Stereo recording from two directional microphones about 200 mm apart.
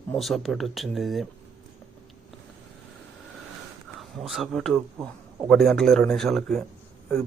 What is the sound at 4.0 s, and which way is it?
Speech, centre (ahead or behind).